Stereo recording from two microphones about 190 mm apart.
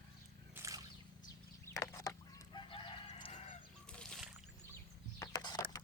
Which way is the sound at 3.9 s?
5° left (ahead or behind).